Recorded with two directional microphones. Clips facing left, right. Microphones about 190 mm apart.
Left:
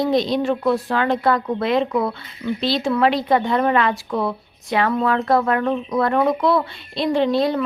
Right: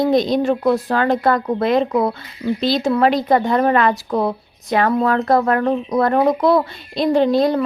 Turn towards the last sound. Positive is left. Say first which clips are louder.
# right 3 dB
turn(degrees=-45)  # may be behind; listen again after turning